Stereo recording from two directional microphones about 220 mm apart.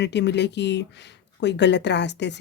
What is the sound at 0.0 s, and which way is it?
Speech, 50° left (ahead or behind).